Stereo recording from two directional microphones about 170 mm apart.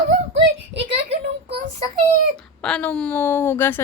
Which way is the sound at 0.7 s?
35° right (ahead or behind).